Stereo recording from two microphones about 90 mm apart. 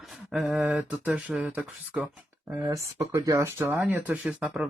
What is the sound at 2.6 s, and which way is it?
Speech, 35° right (ahead or behind).